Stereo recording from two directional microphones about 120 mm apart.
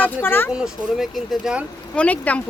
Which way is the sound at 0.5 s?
5° right (ahead or behind).